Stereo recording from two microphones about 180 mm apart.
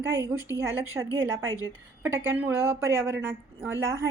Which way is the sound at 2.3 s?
10° right (ahead or behind).